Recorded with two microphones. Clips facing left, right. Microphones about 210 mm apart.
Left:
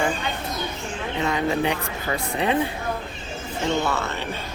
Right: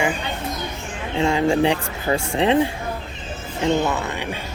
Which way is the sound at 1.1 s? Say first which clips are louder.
Right 5 dB; 25° right (ahead or behind).